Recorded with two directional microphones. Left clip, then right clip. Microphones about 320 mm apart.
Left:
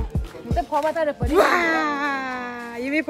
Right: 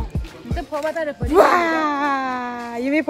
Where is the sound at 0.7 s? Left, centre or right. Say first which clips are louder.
Left 1 dB; left.